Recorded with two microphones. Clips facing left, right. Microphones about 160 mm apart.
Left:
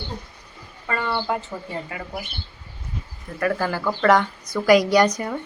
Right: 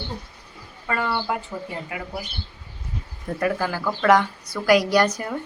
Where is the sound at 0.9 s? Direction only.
5° right (ahead or behind).